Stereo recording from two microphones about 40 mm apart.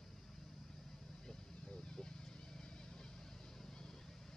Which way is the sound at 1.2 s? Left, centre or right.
Centre.